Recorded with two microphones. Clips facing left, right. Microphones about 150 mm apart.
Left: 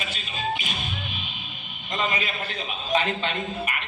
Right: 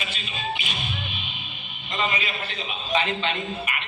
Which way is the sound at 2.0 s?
45° left (ahead or behind).